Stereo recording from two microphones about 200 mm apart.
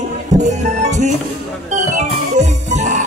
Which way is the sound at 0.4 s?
35° right (ahead or behind).